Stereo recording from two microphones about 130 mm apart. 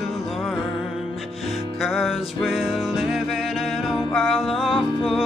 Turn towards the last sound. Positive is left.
turn(degrees=-5)  # may be behind; listen again after turning